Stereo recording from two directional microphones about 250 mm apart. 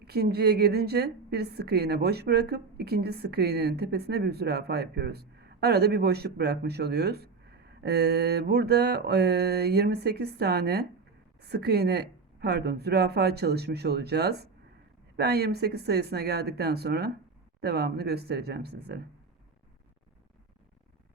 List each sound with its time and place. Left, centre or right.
0.0 s a woman's voice: right